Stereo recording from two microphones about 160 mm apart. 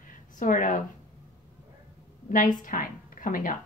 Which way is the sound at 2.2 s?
55° left (ahead or behind).